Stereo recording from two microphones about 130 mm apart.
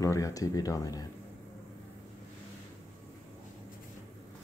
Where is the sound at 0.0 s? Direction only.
25° left (ahead or behind).